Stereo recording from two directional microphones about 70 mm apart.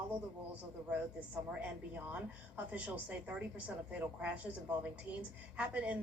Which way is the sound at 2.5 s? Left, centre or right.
Centre.